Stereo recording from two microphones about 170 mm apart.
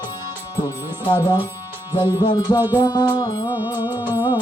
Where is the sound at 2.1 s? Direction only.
25° left (ahead or behind).